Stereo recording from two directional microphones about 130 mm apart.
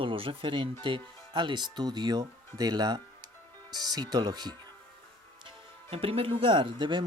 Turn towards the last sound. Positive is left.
turn(degrees=-35)  # may be behind; listen again after turning